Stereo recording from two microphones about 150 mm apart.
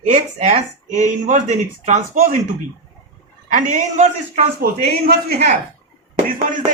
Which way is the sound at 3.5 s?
60° right (ahead or behind).